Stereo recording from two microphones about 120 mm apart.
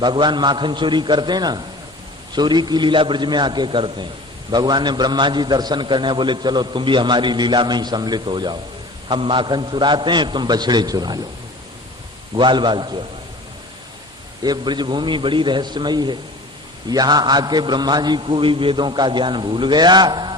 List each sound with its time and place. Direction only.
0.0 s a man's voice: 40° right (ahead or behind)
12.3 s a man's voice: 40° right (ahead or behind)
14.4 s a man's voice: 35° right (ahead or behind)